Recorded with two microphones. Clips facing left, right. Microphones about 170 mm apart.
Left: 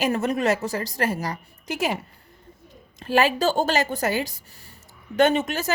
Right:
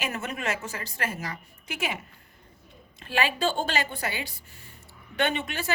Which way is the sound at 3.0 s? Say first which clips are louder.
Left 6 dB; 40° left (ahead or behind).